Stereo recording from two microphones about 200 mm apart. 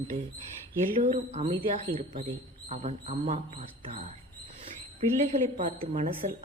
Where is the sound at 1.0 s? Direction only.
35° right (ahead or behind).